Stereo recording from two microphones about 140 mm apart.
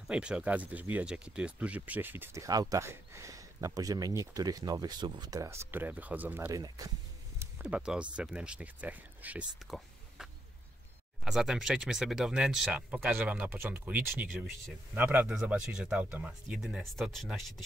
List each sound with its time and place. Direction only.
0.0 s speech: 5° right (ahead or behind)
6.5 s speech: 25° right (ahead or behind)
7.6 s speech: 5° right (ahead or behind)
9.7 s whispering: centre (ahead or behind)
11.2 s speech: 5° right (ahead or behind)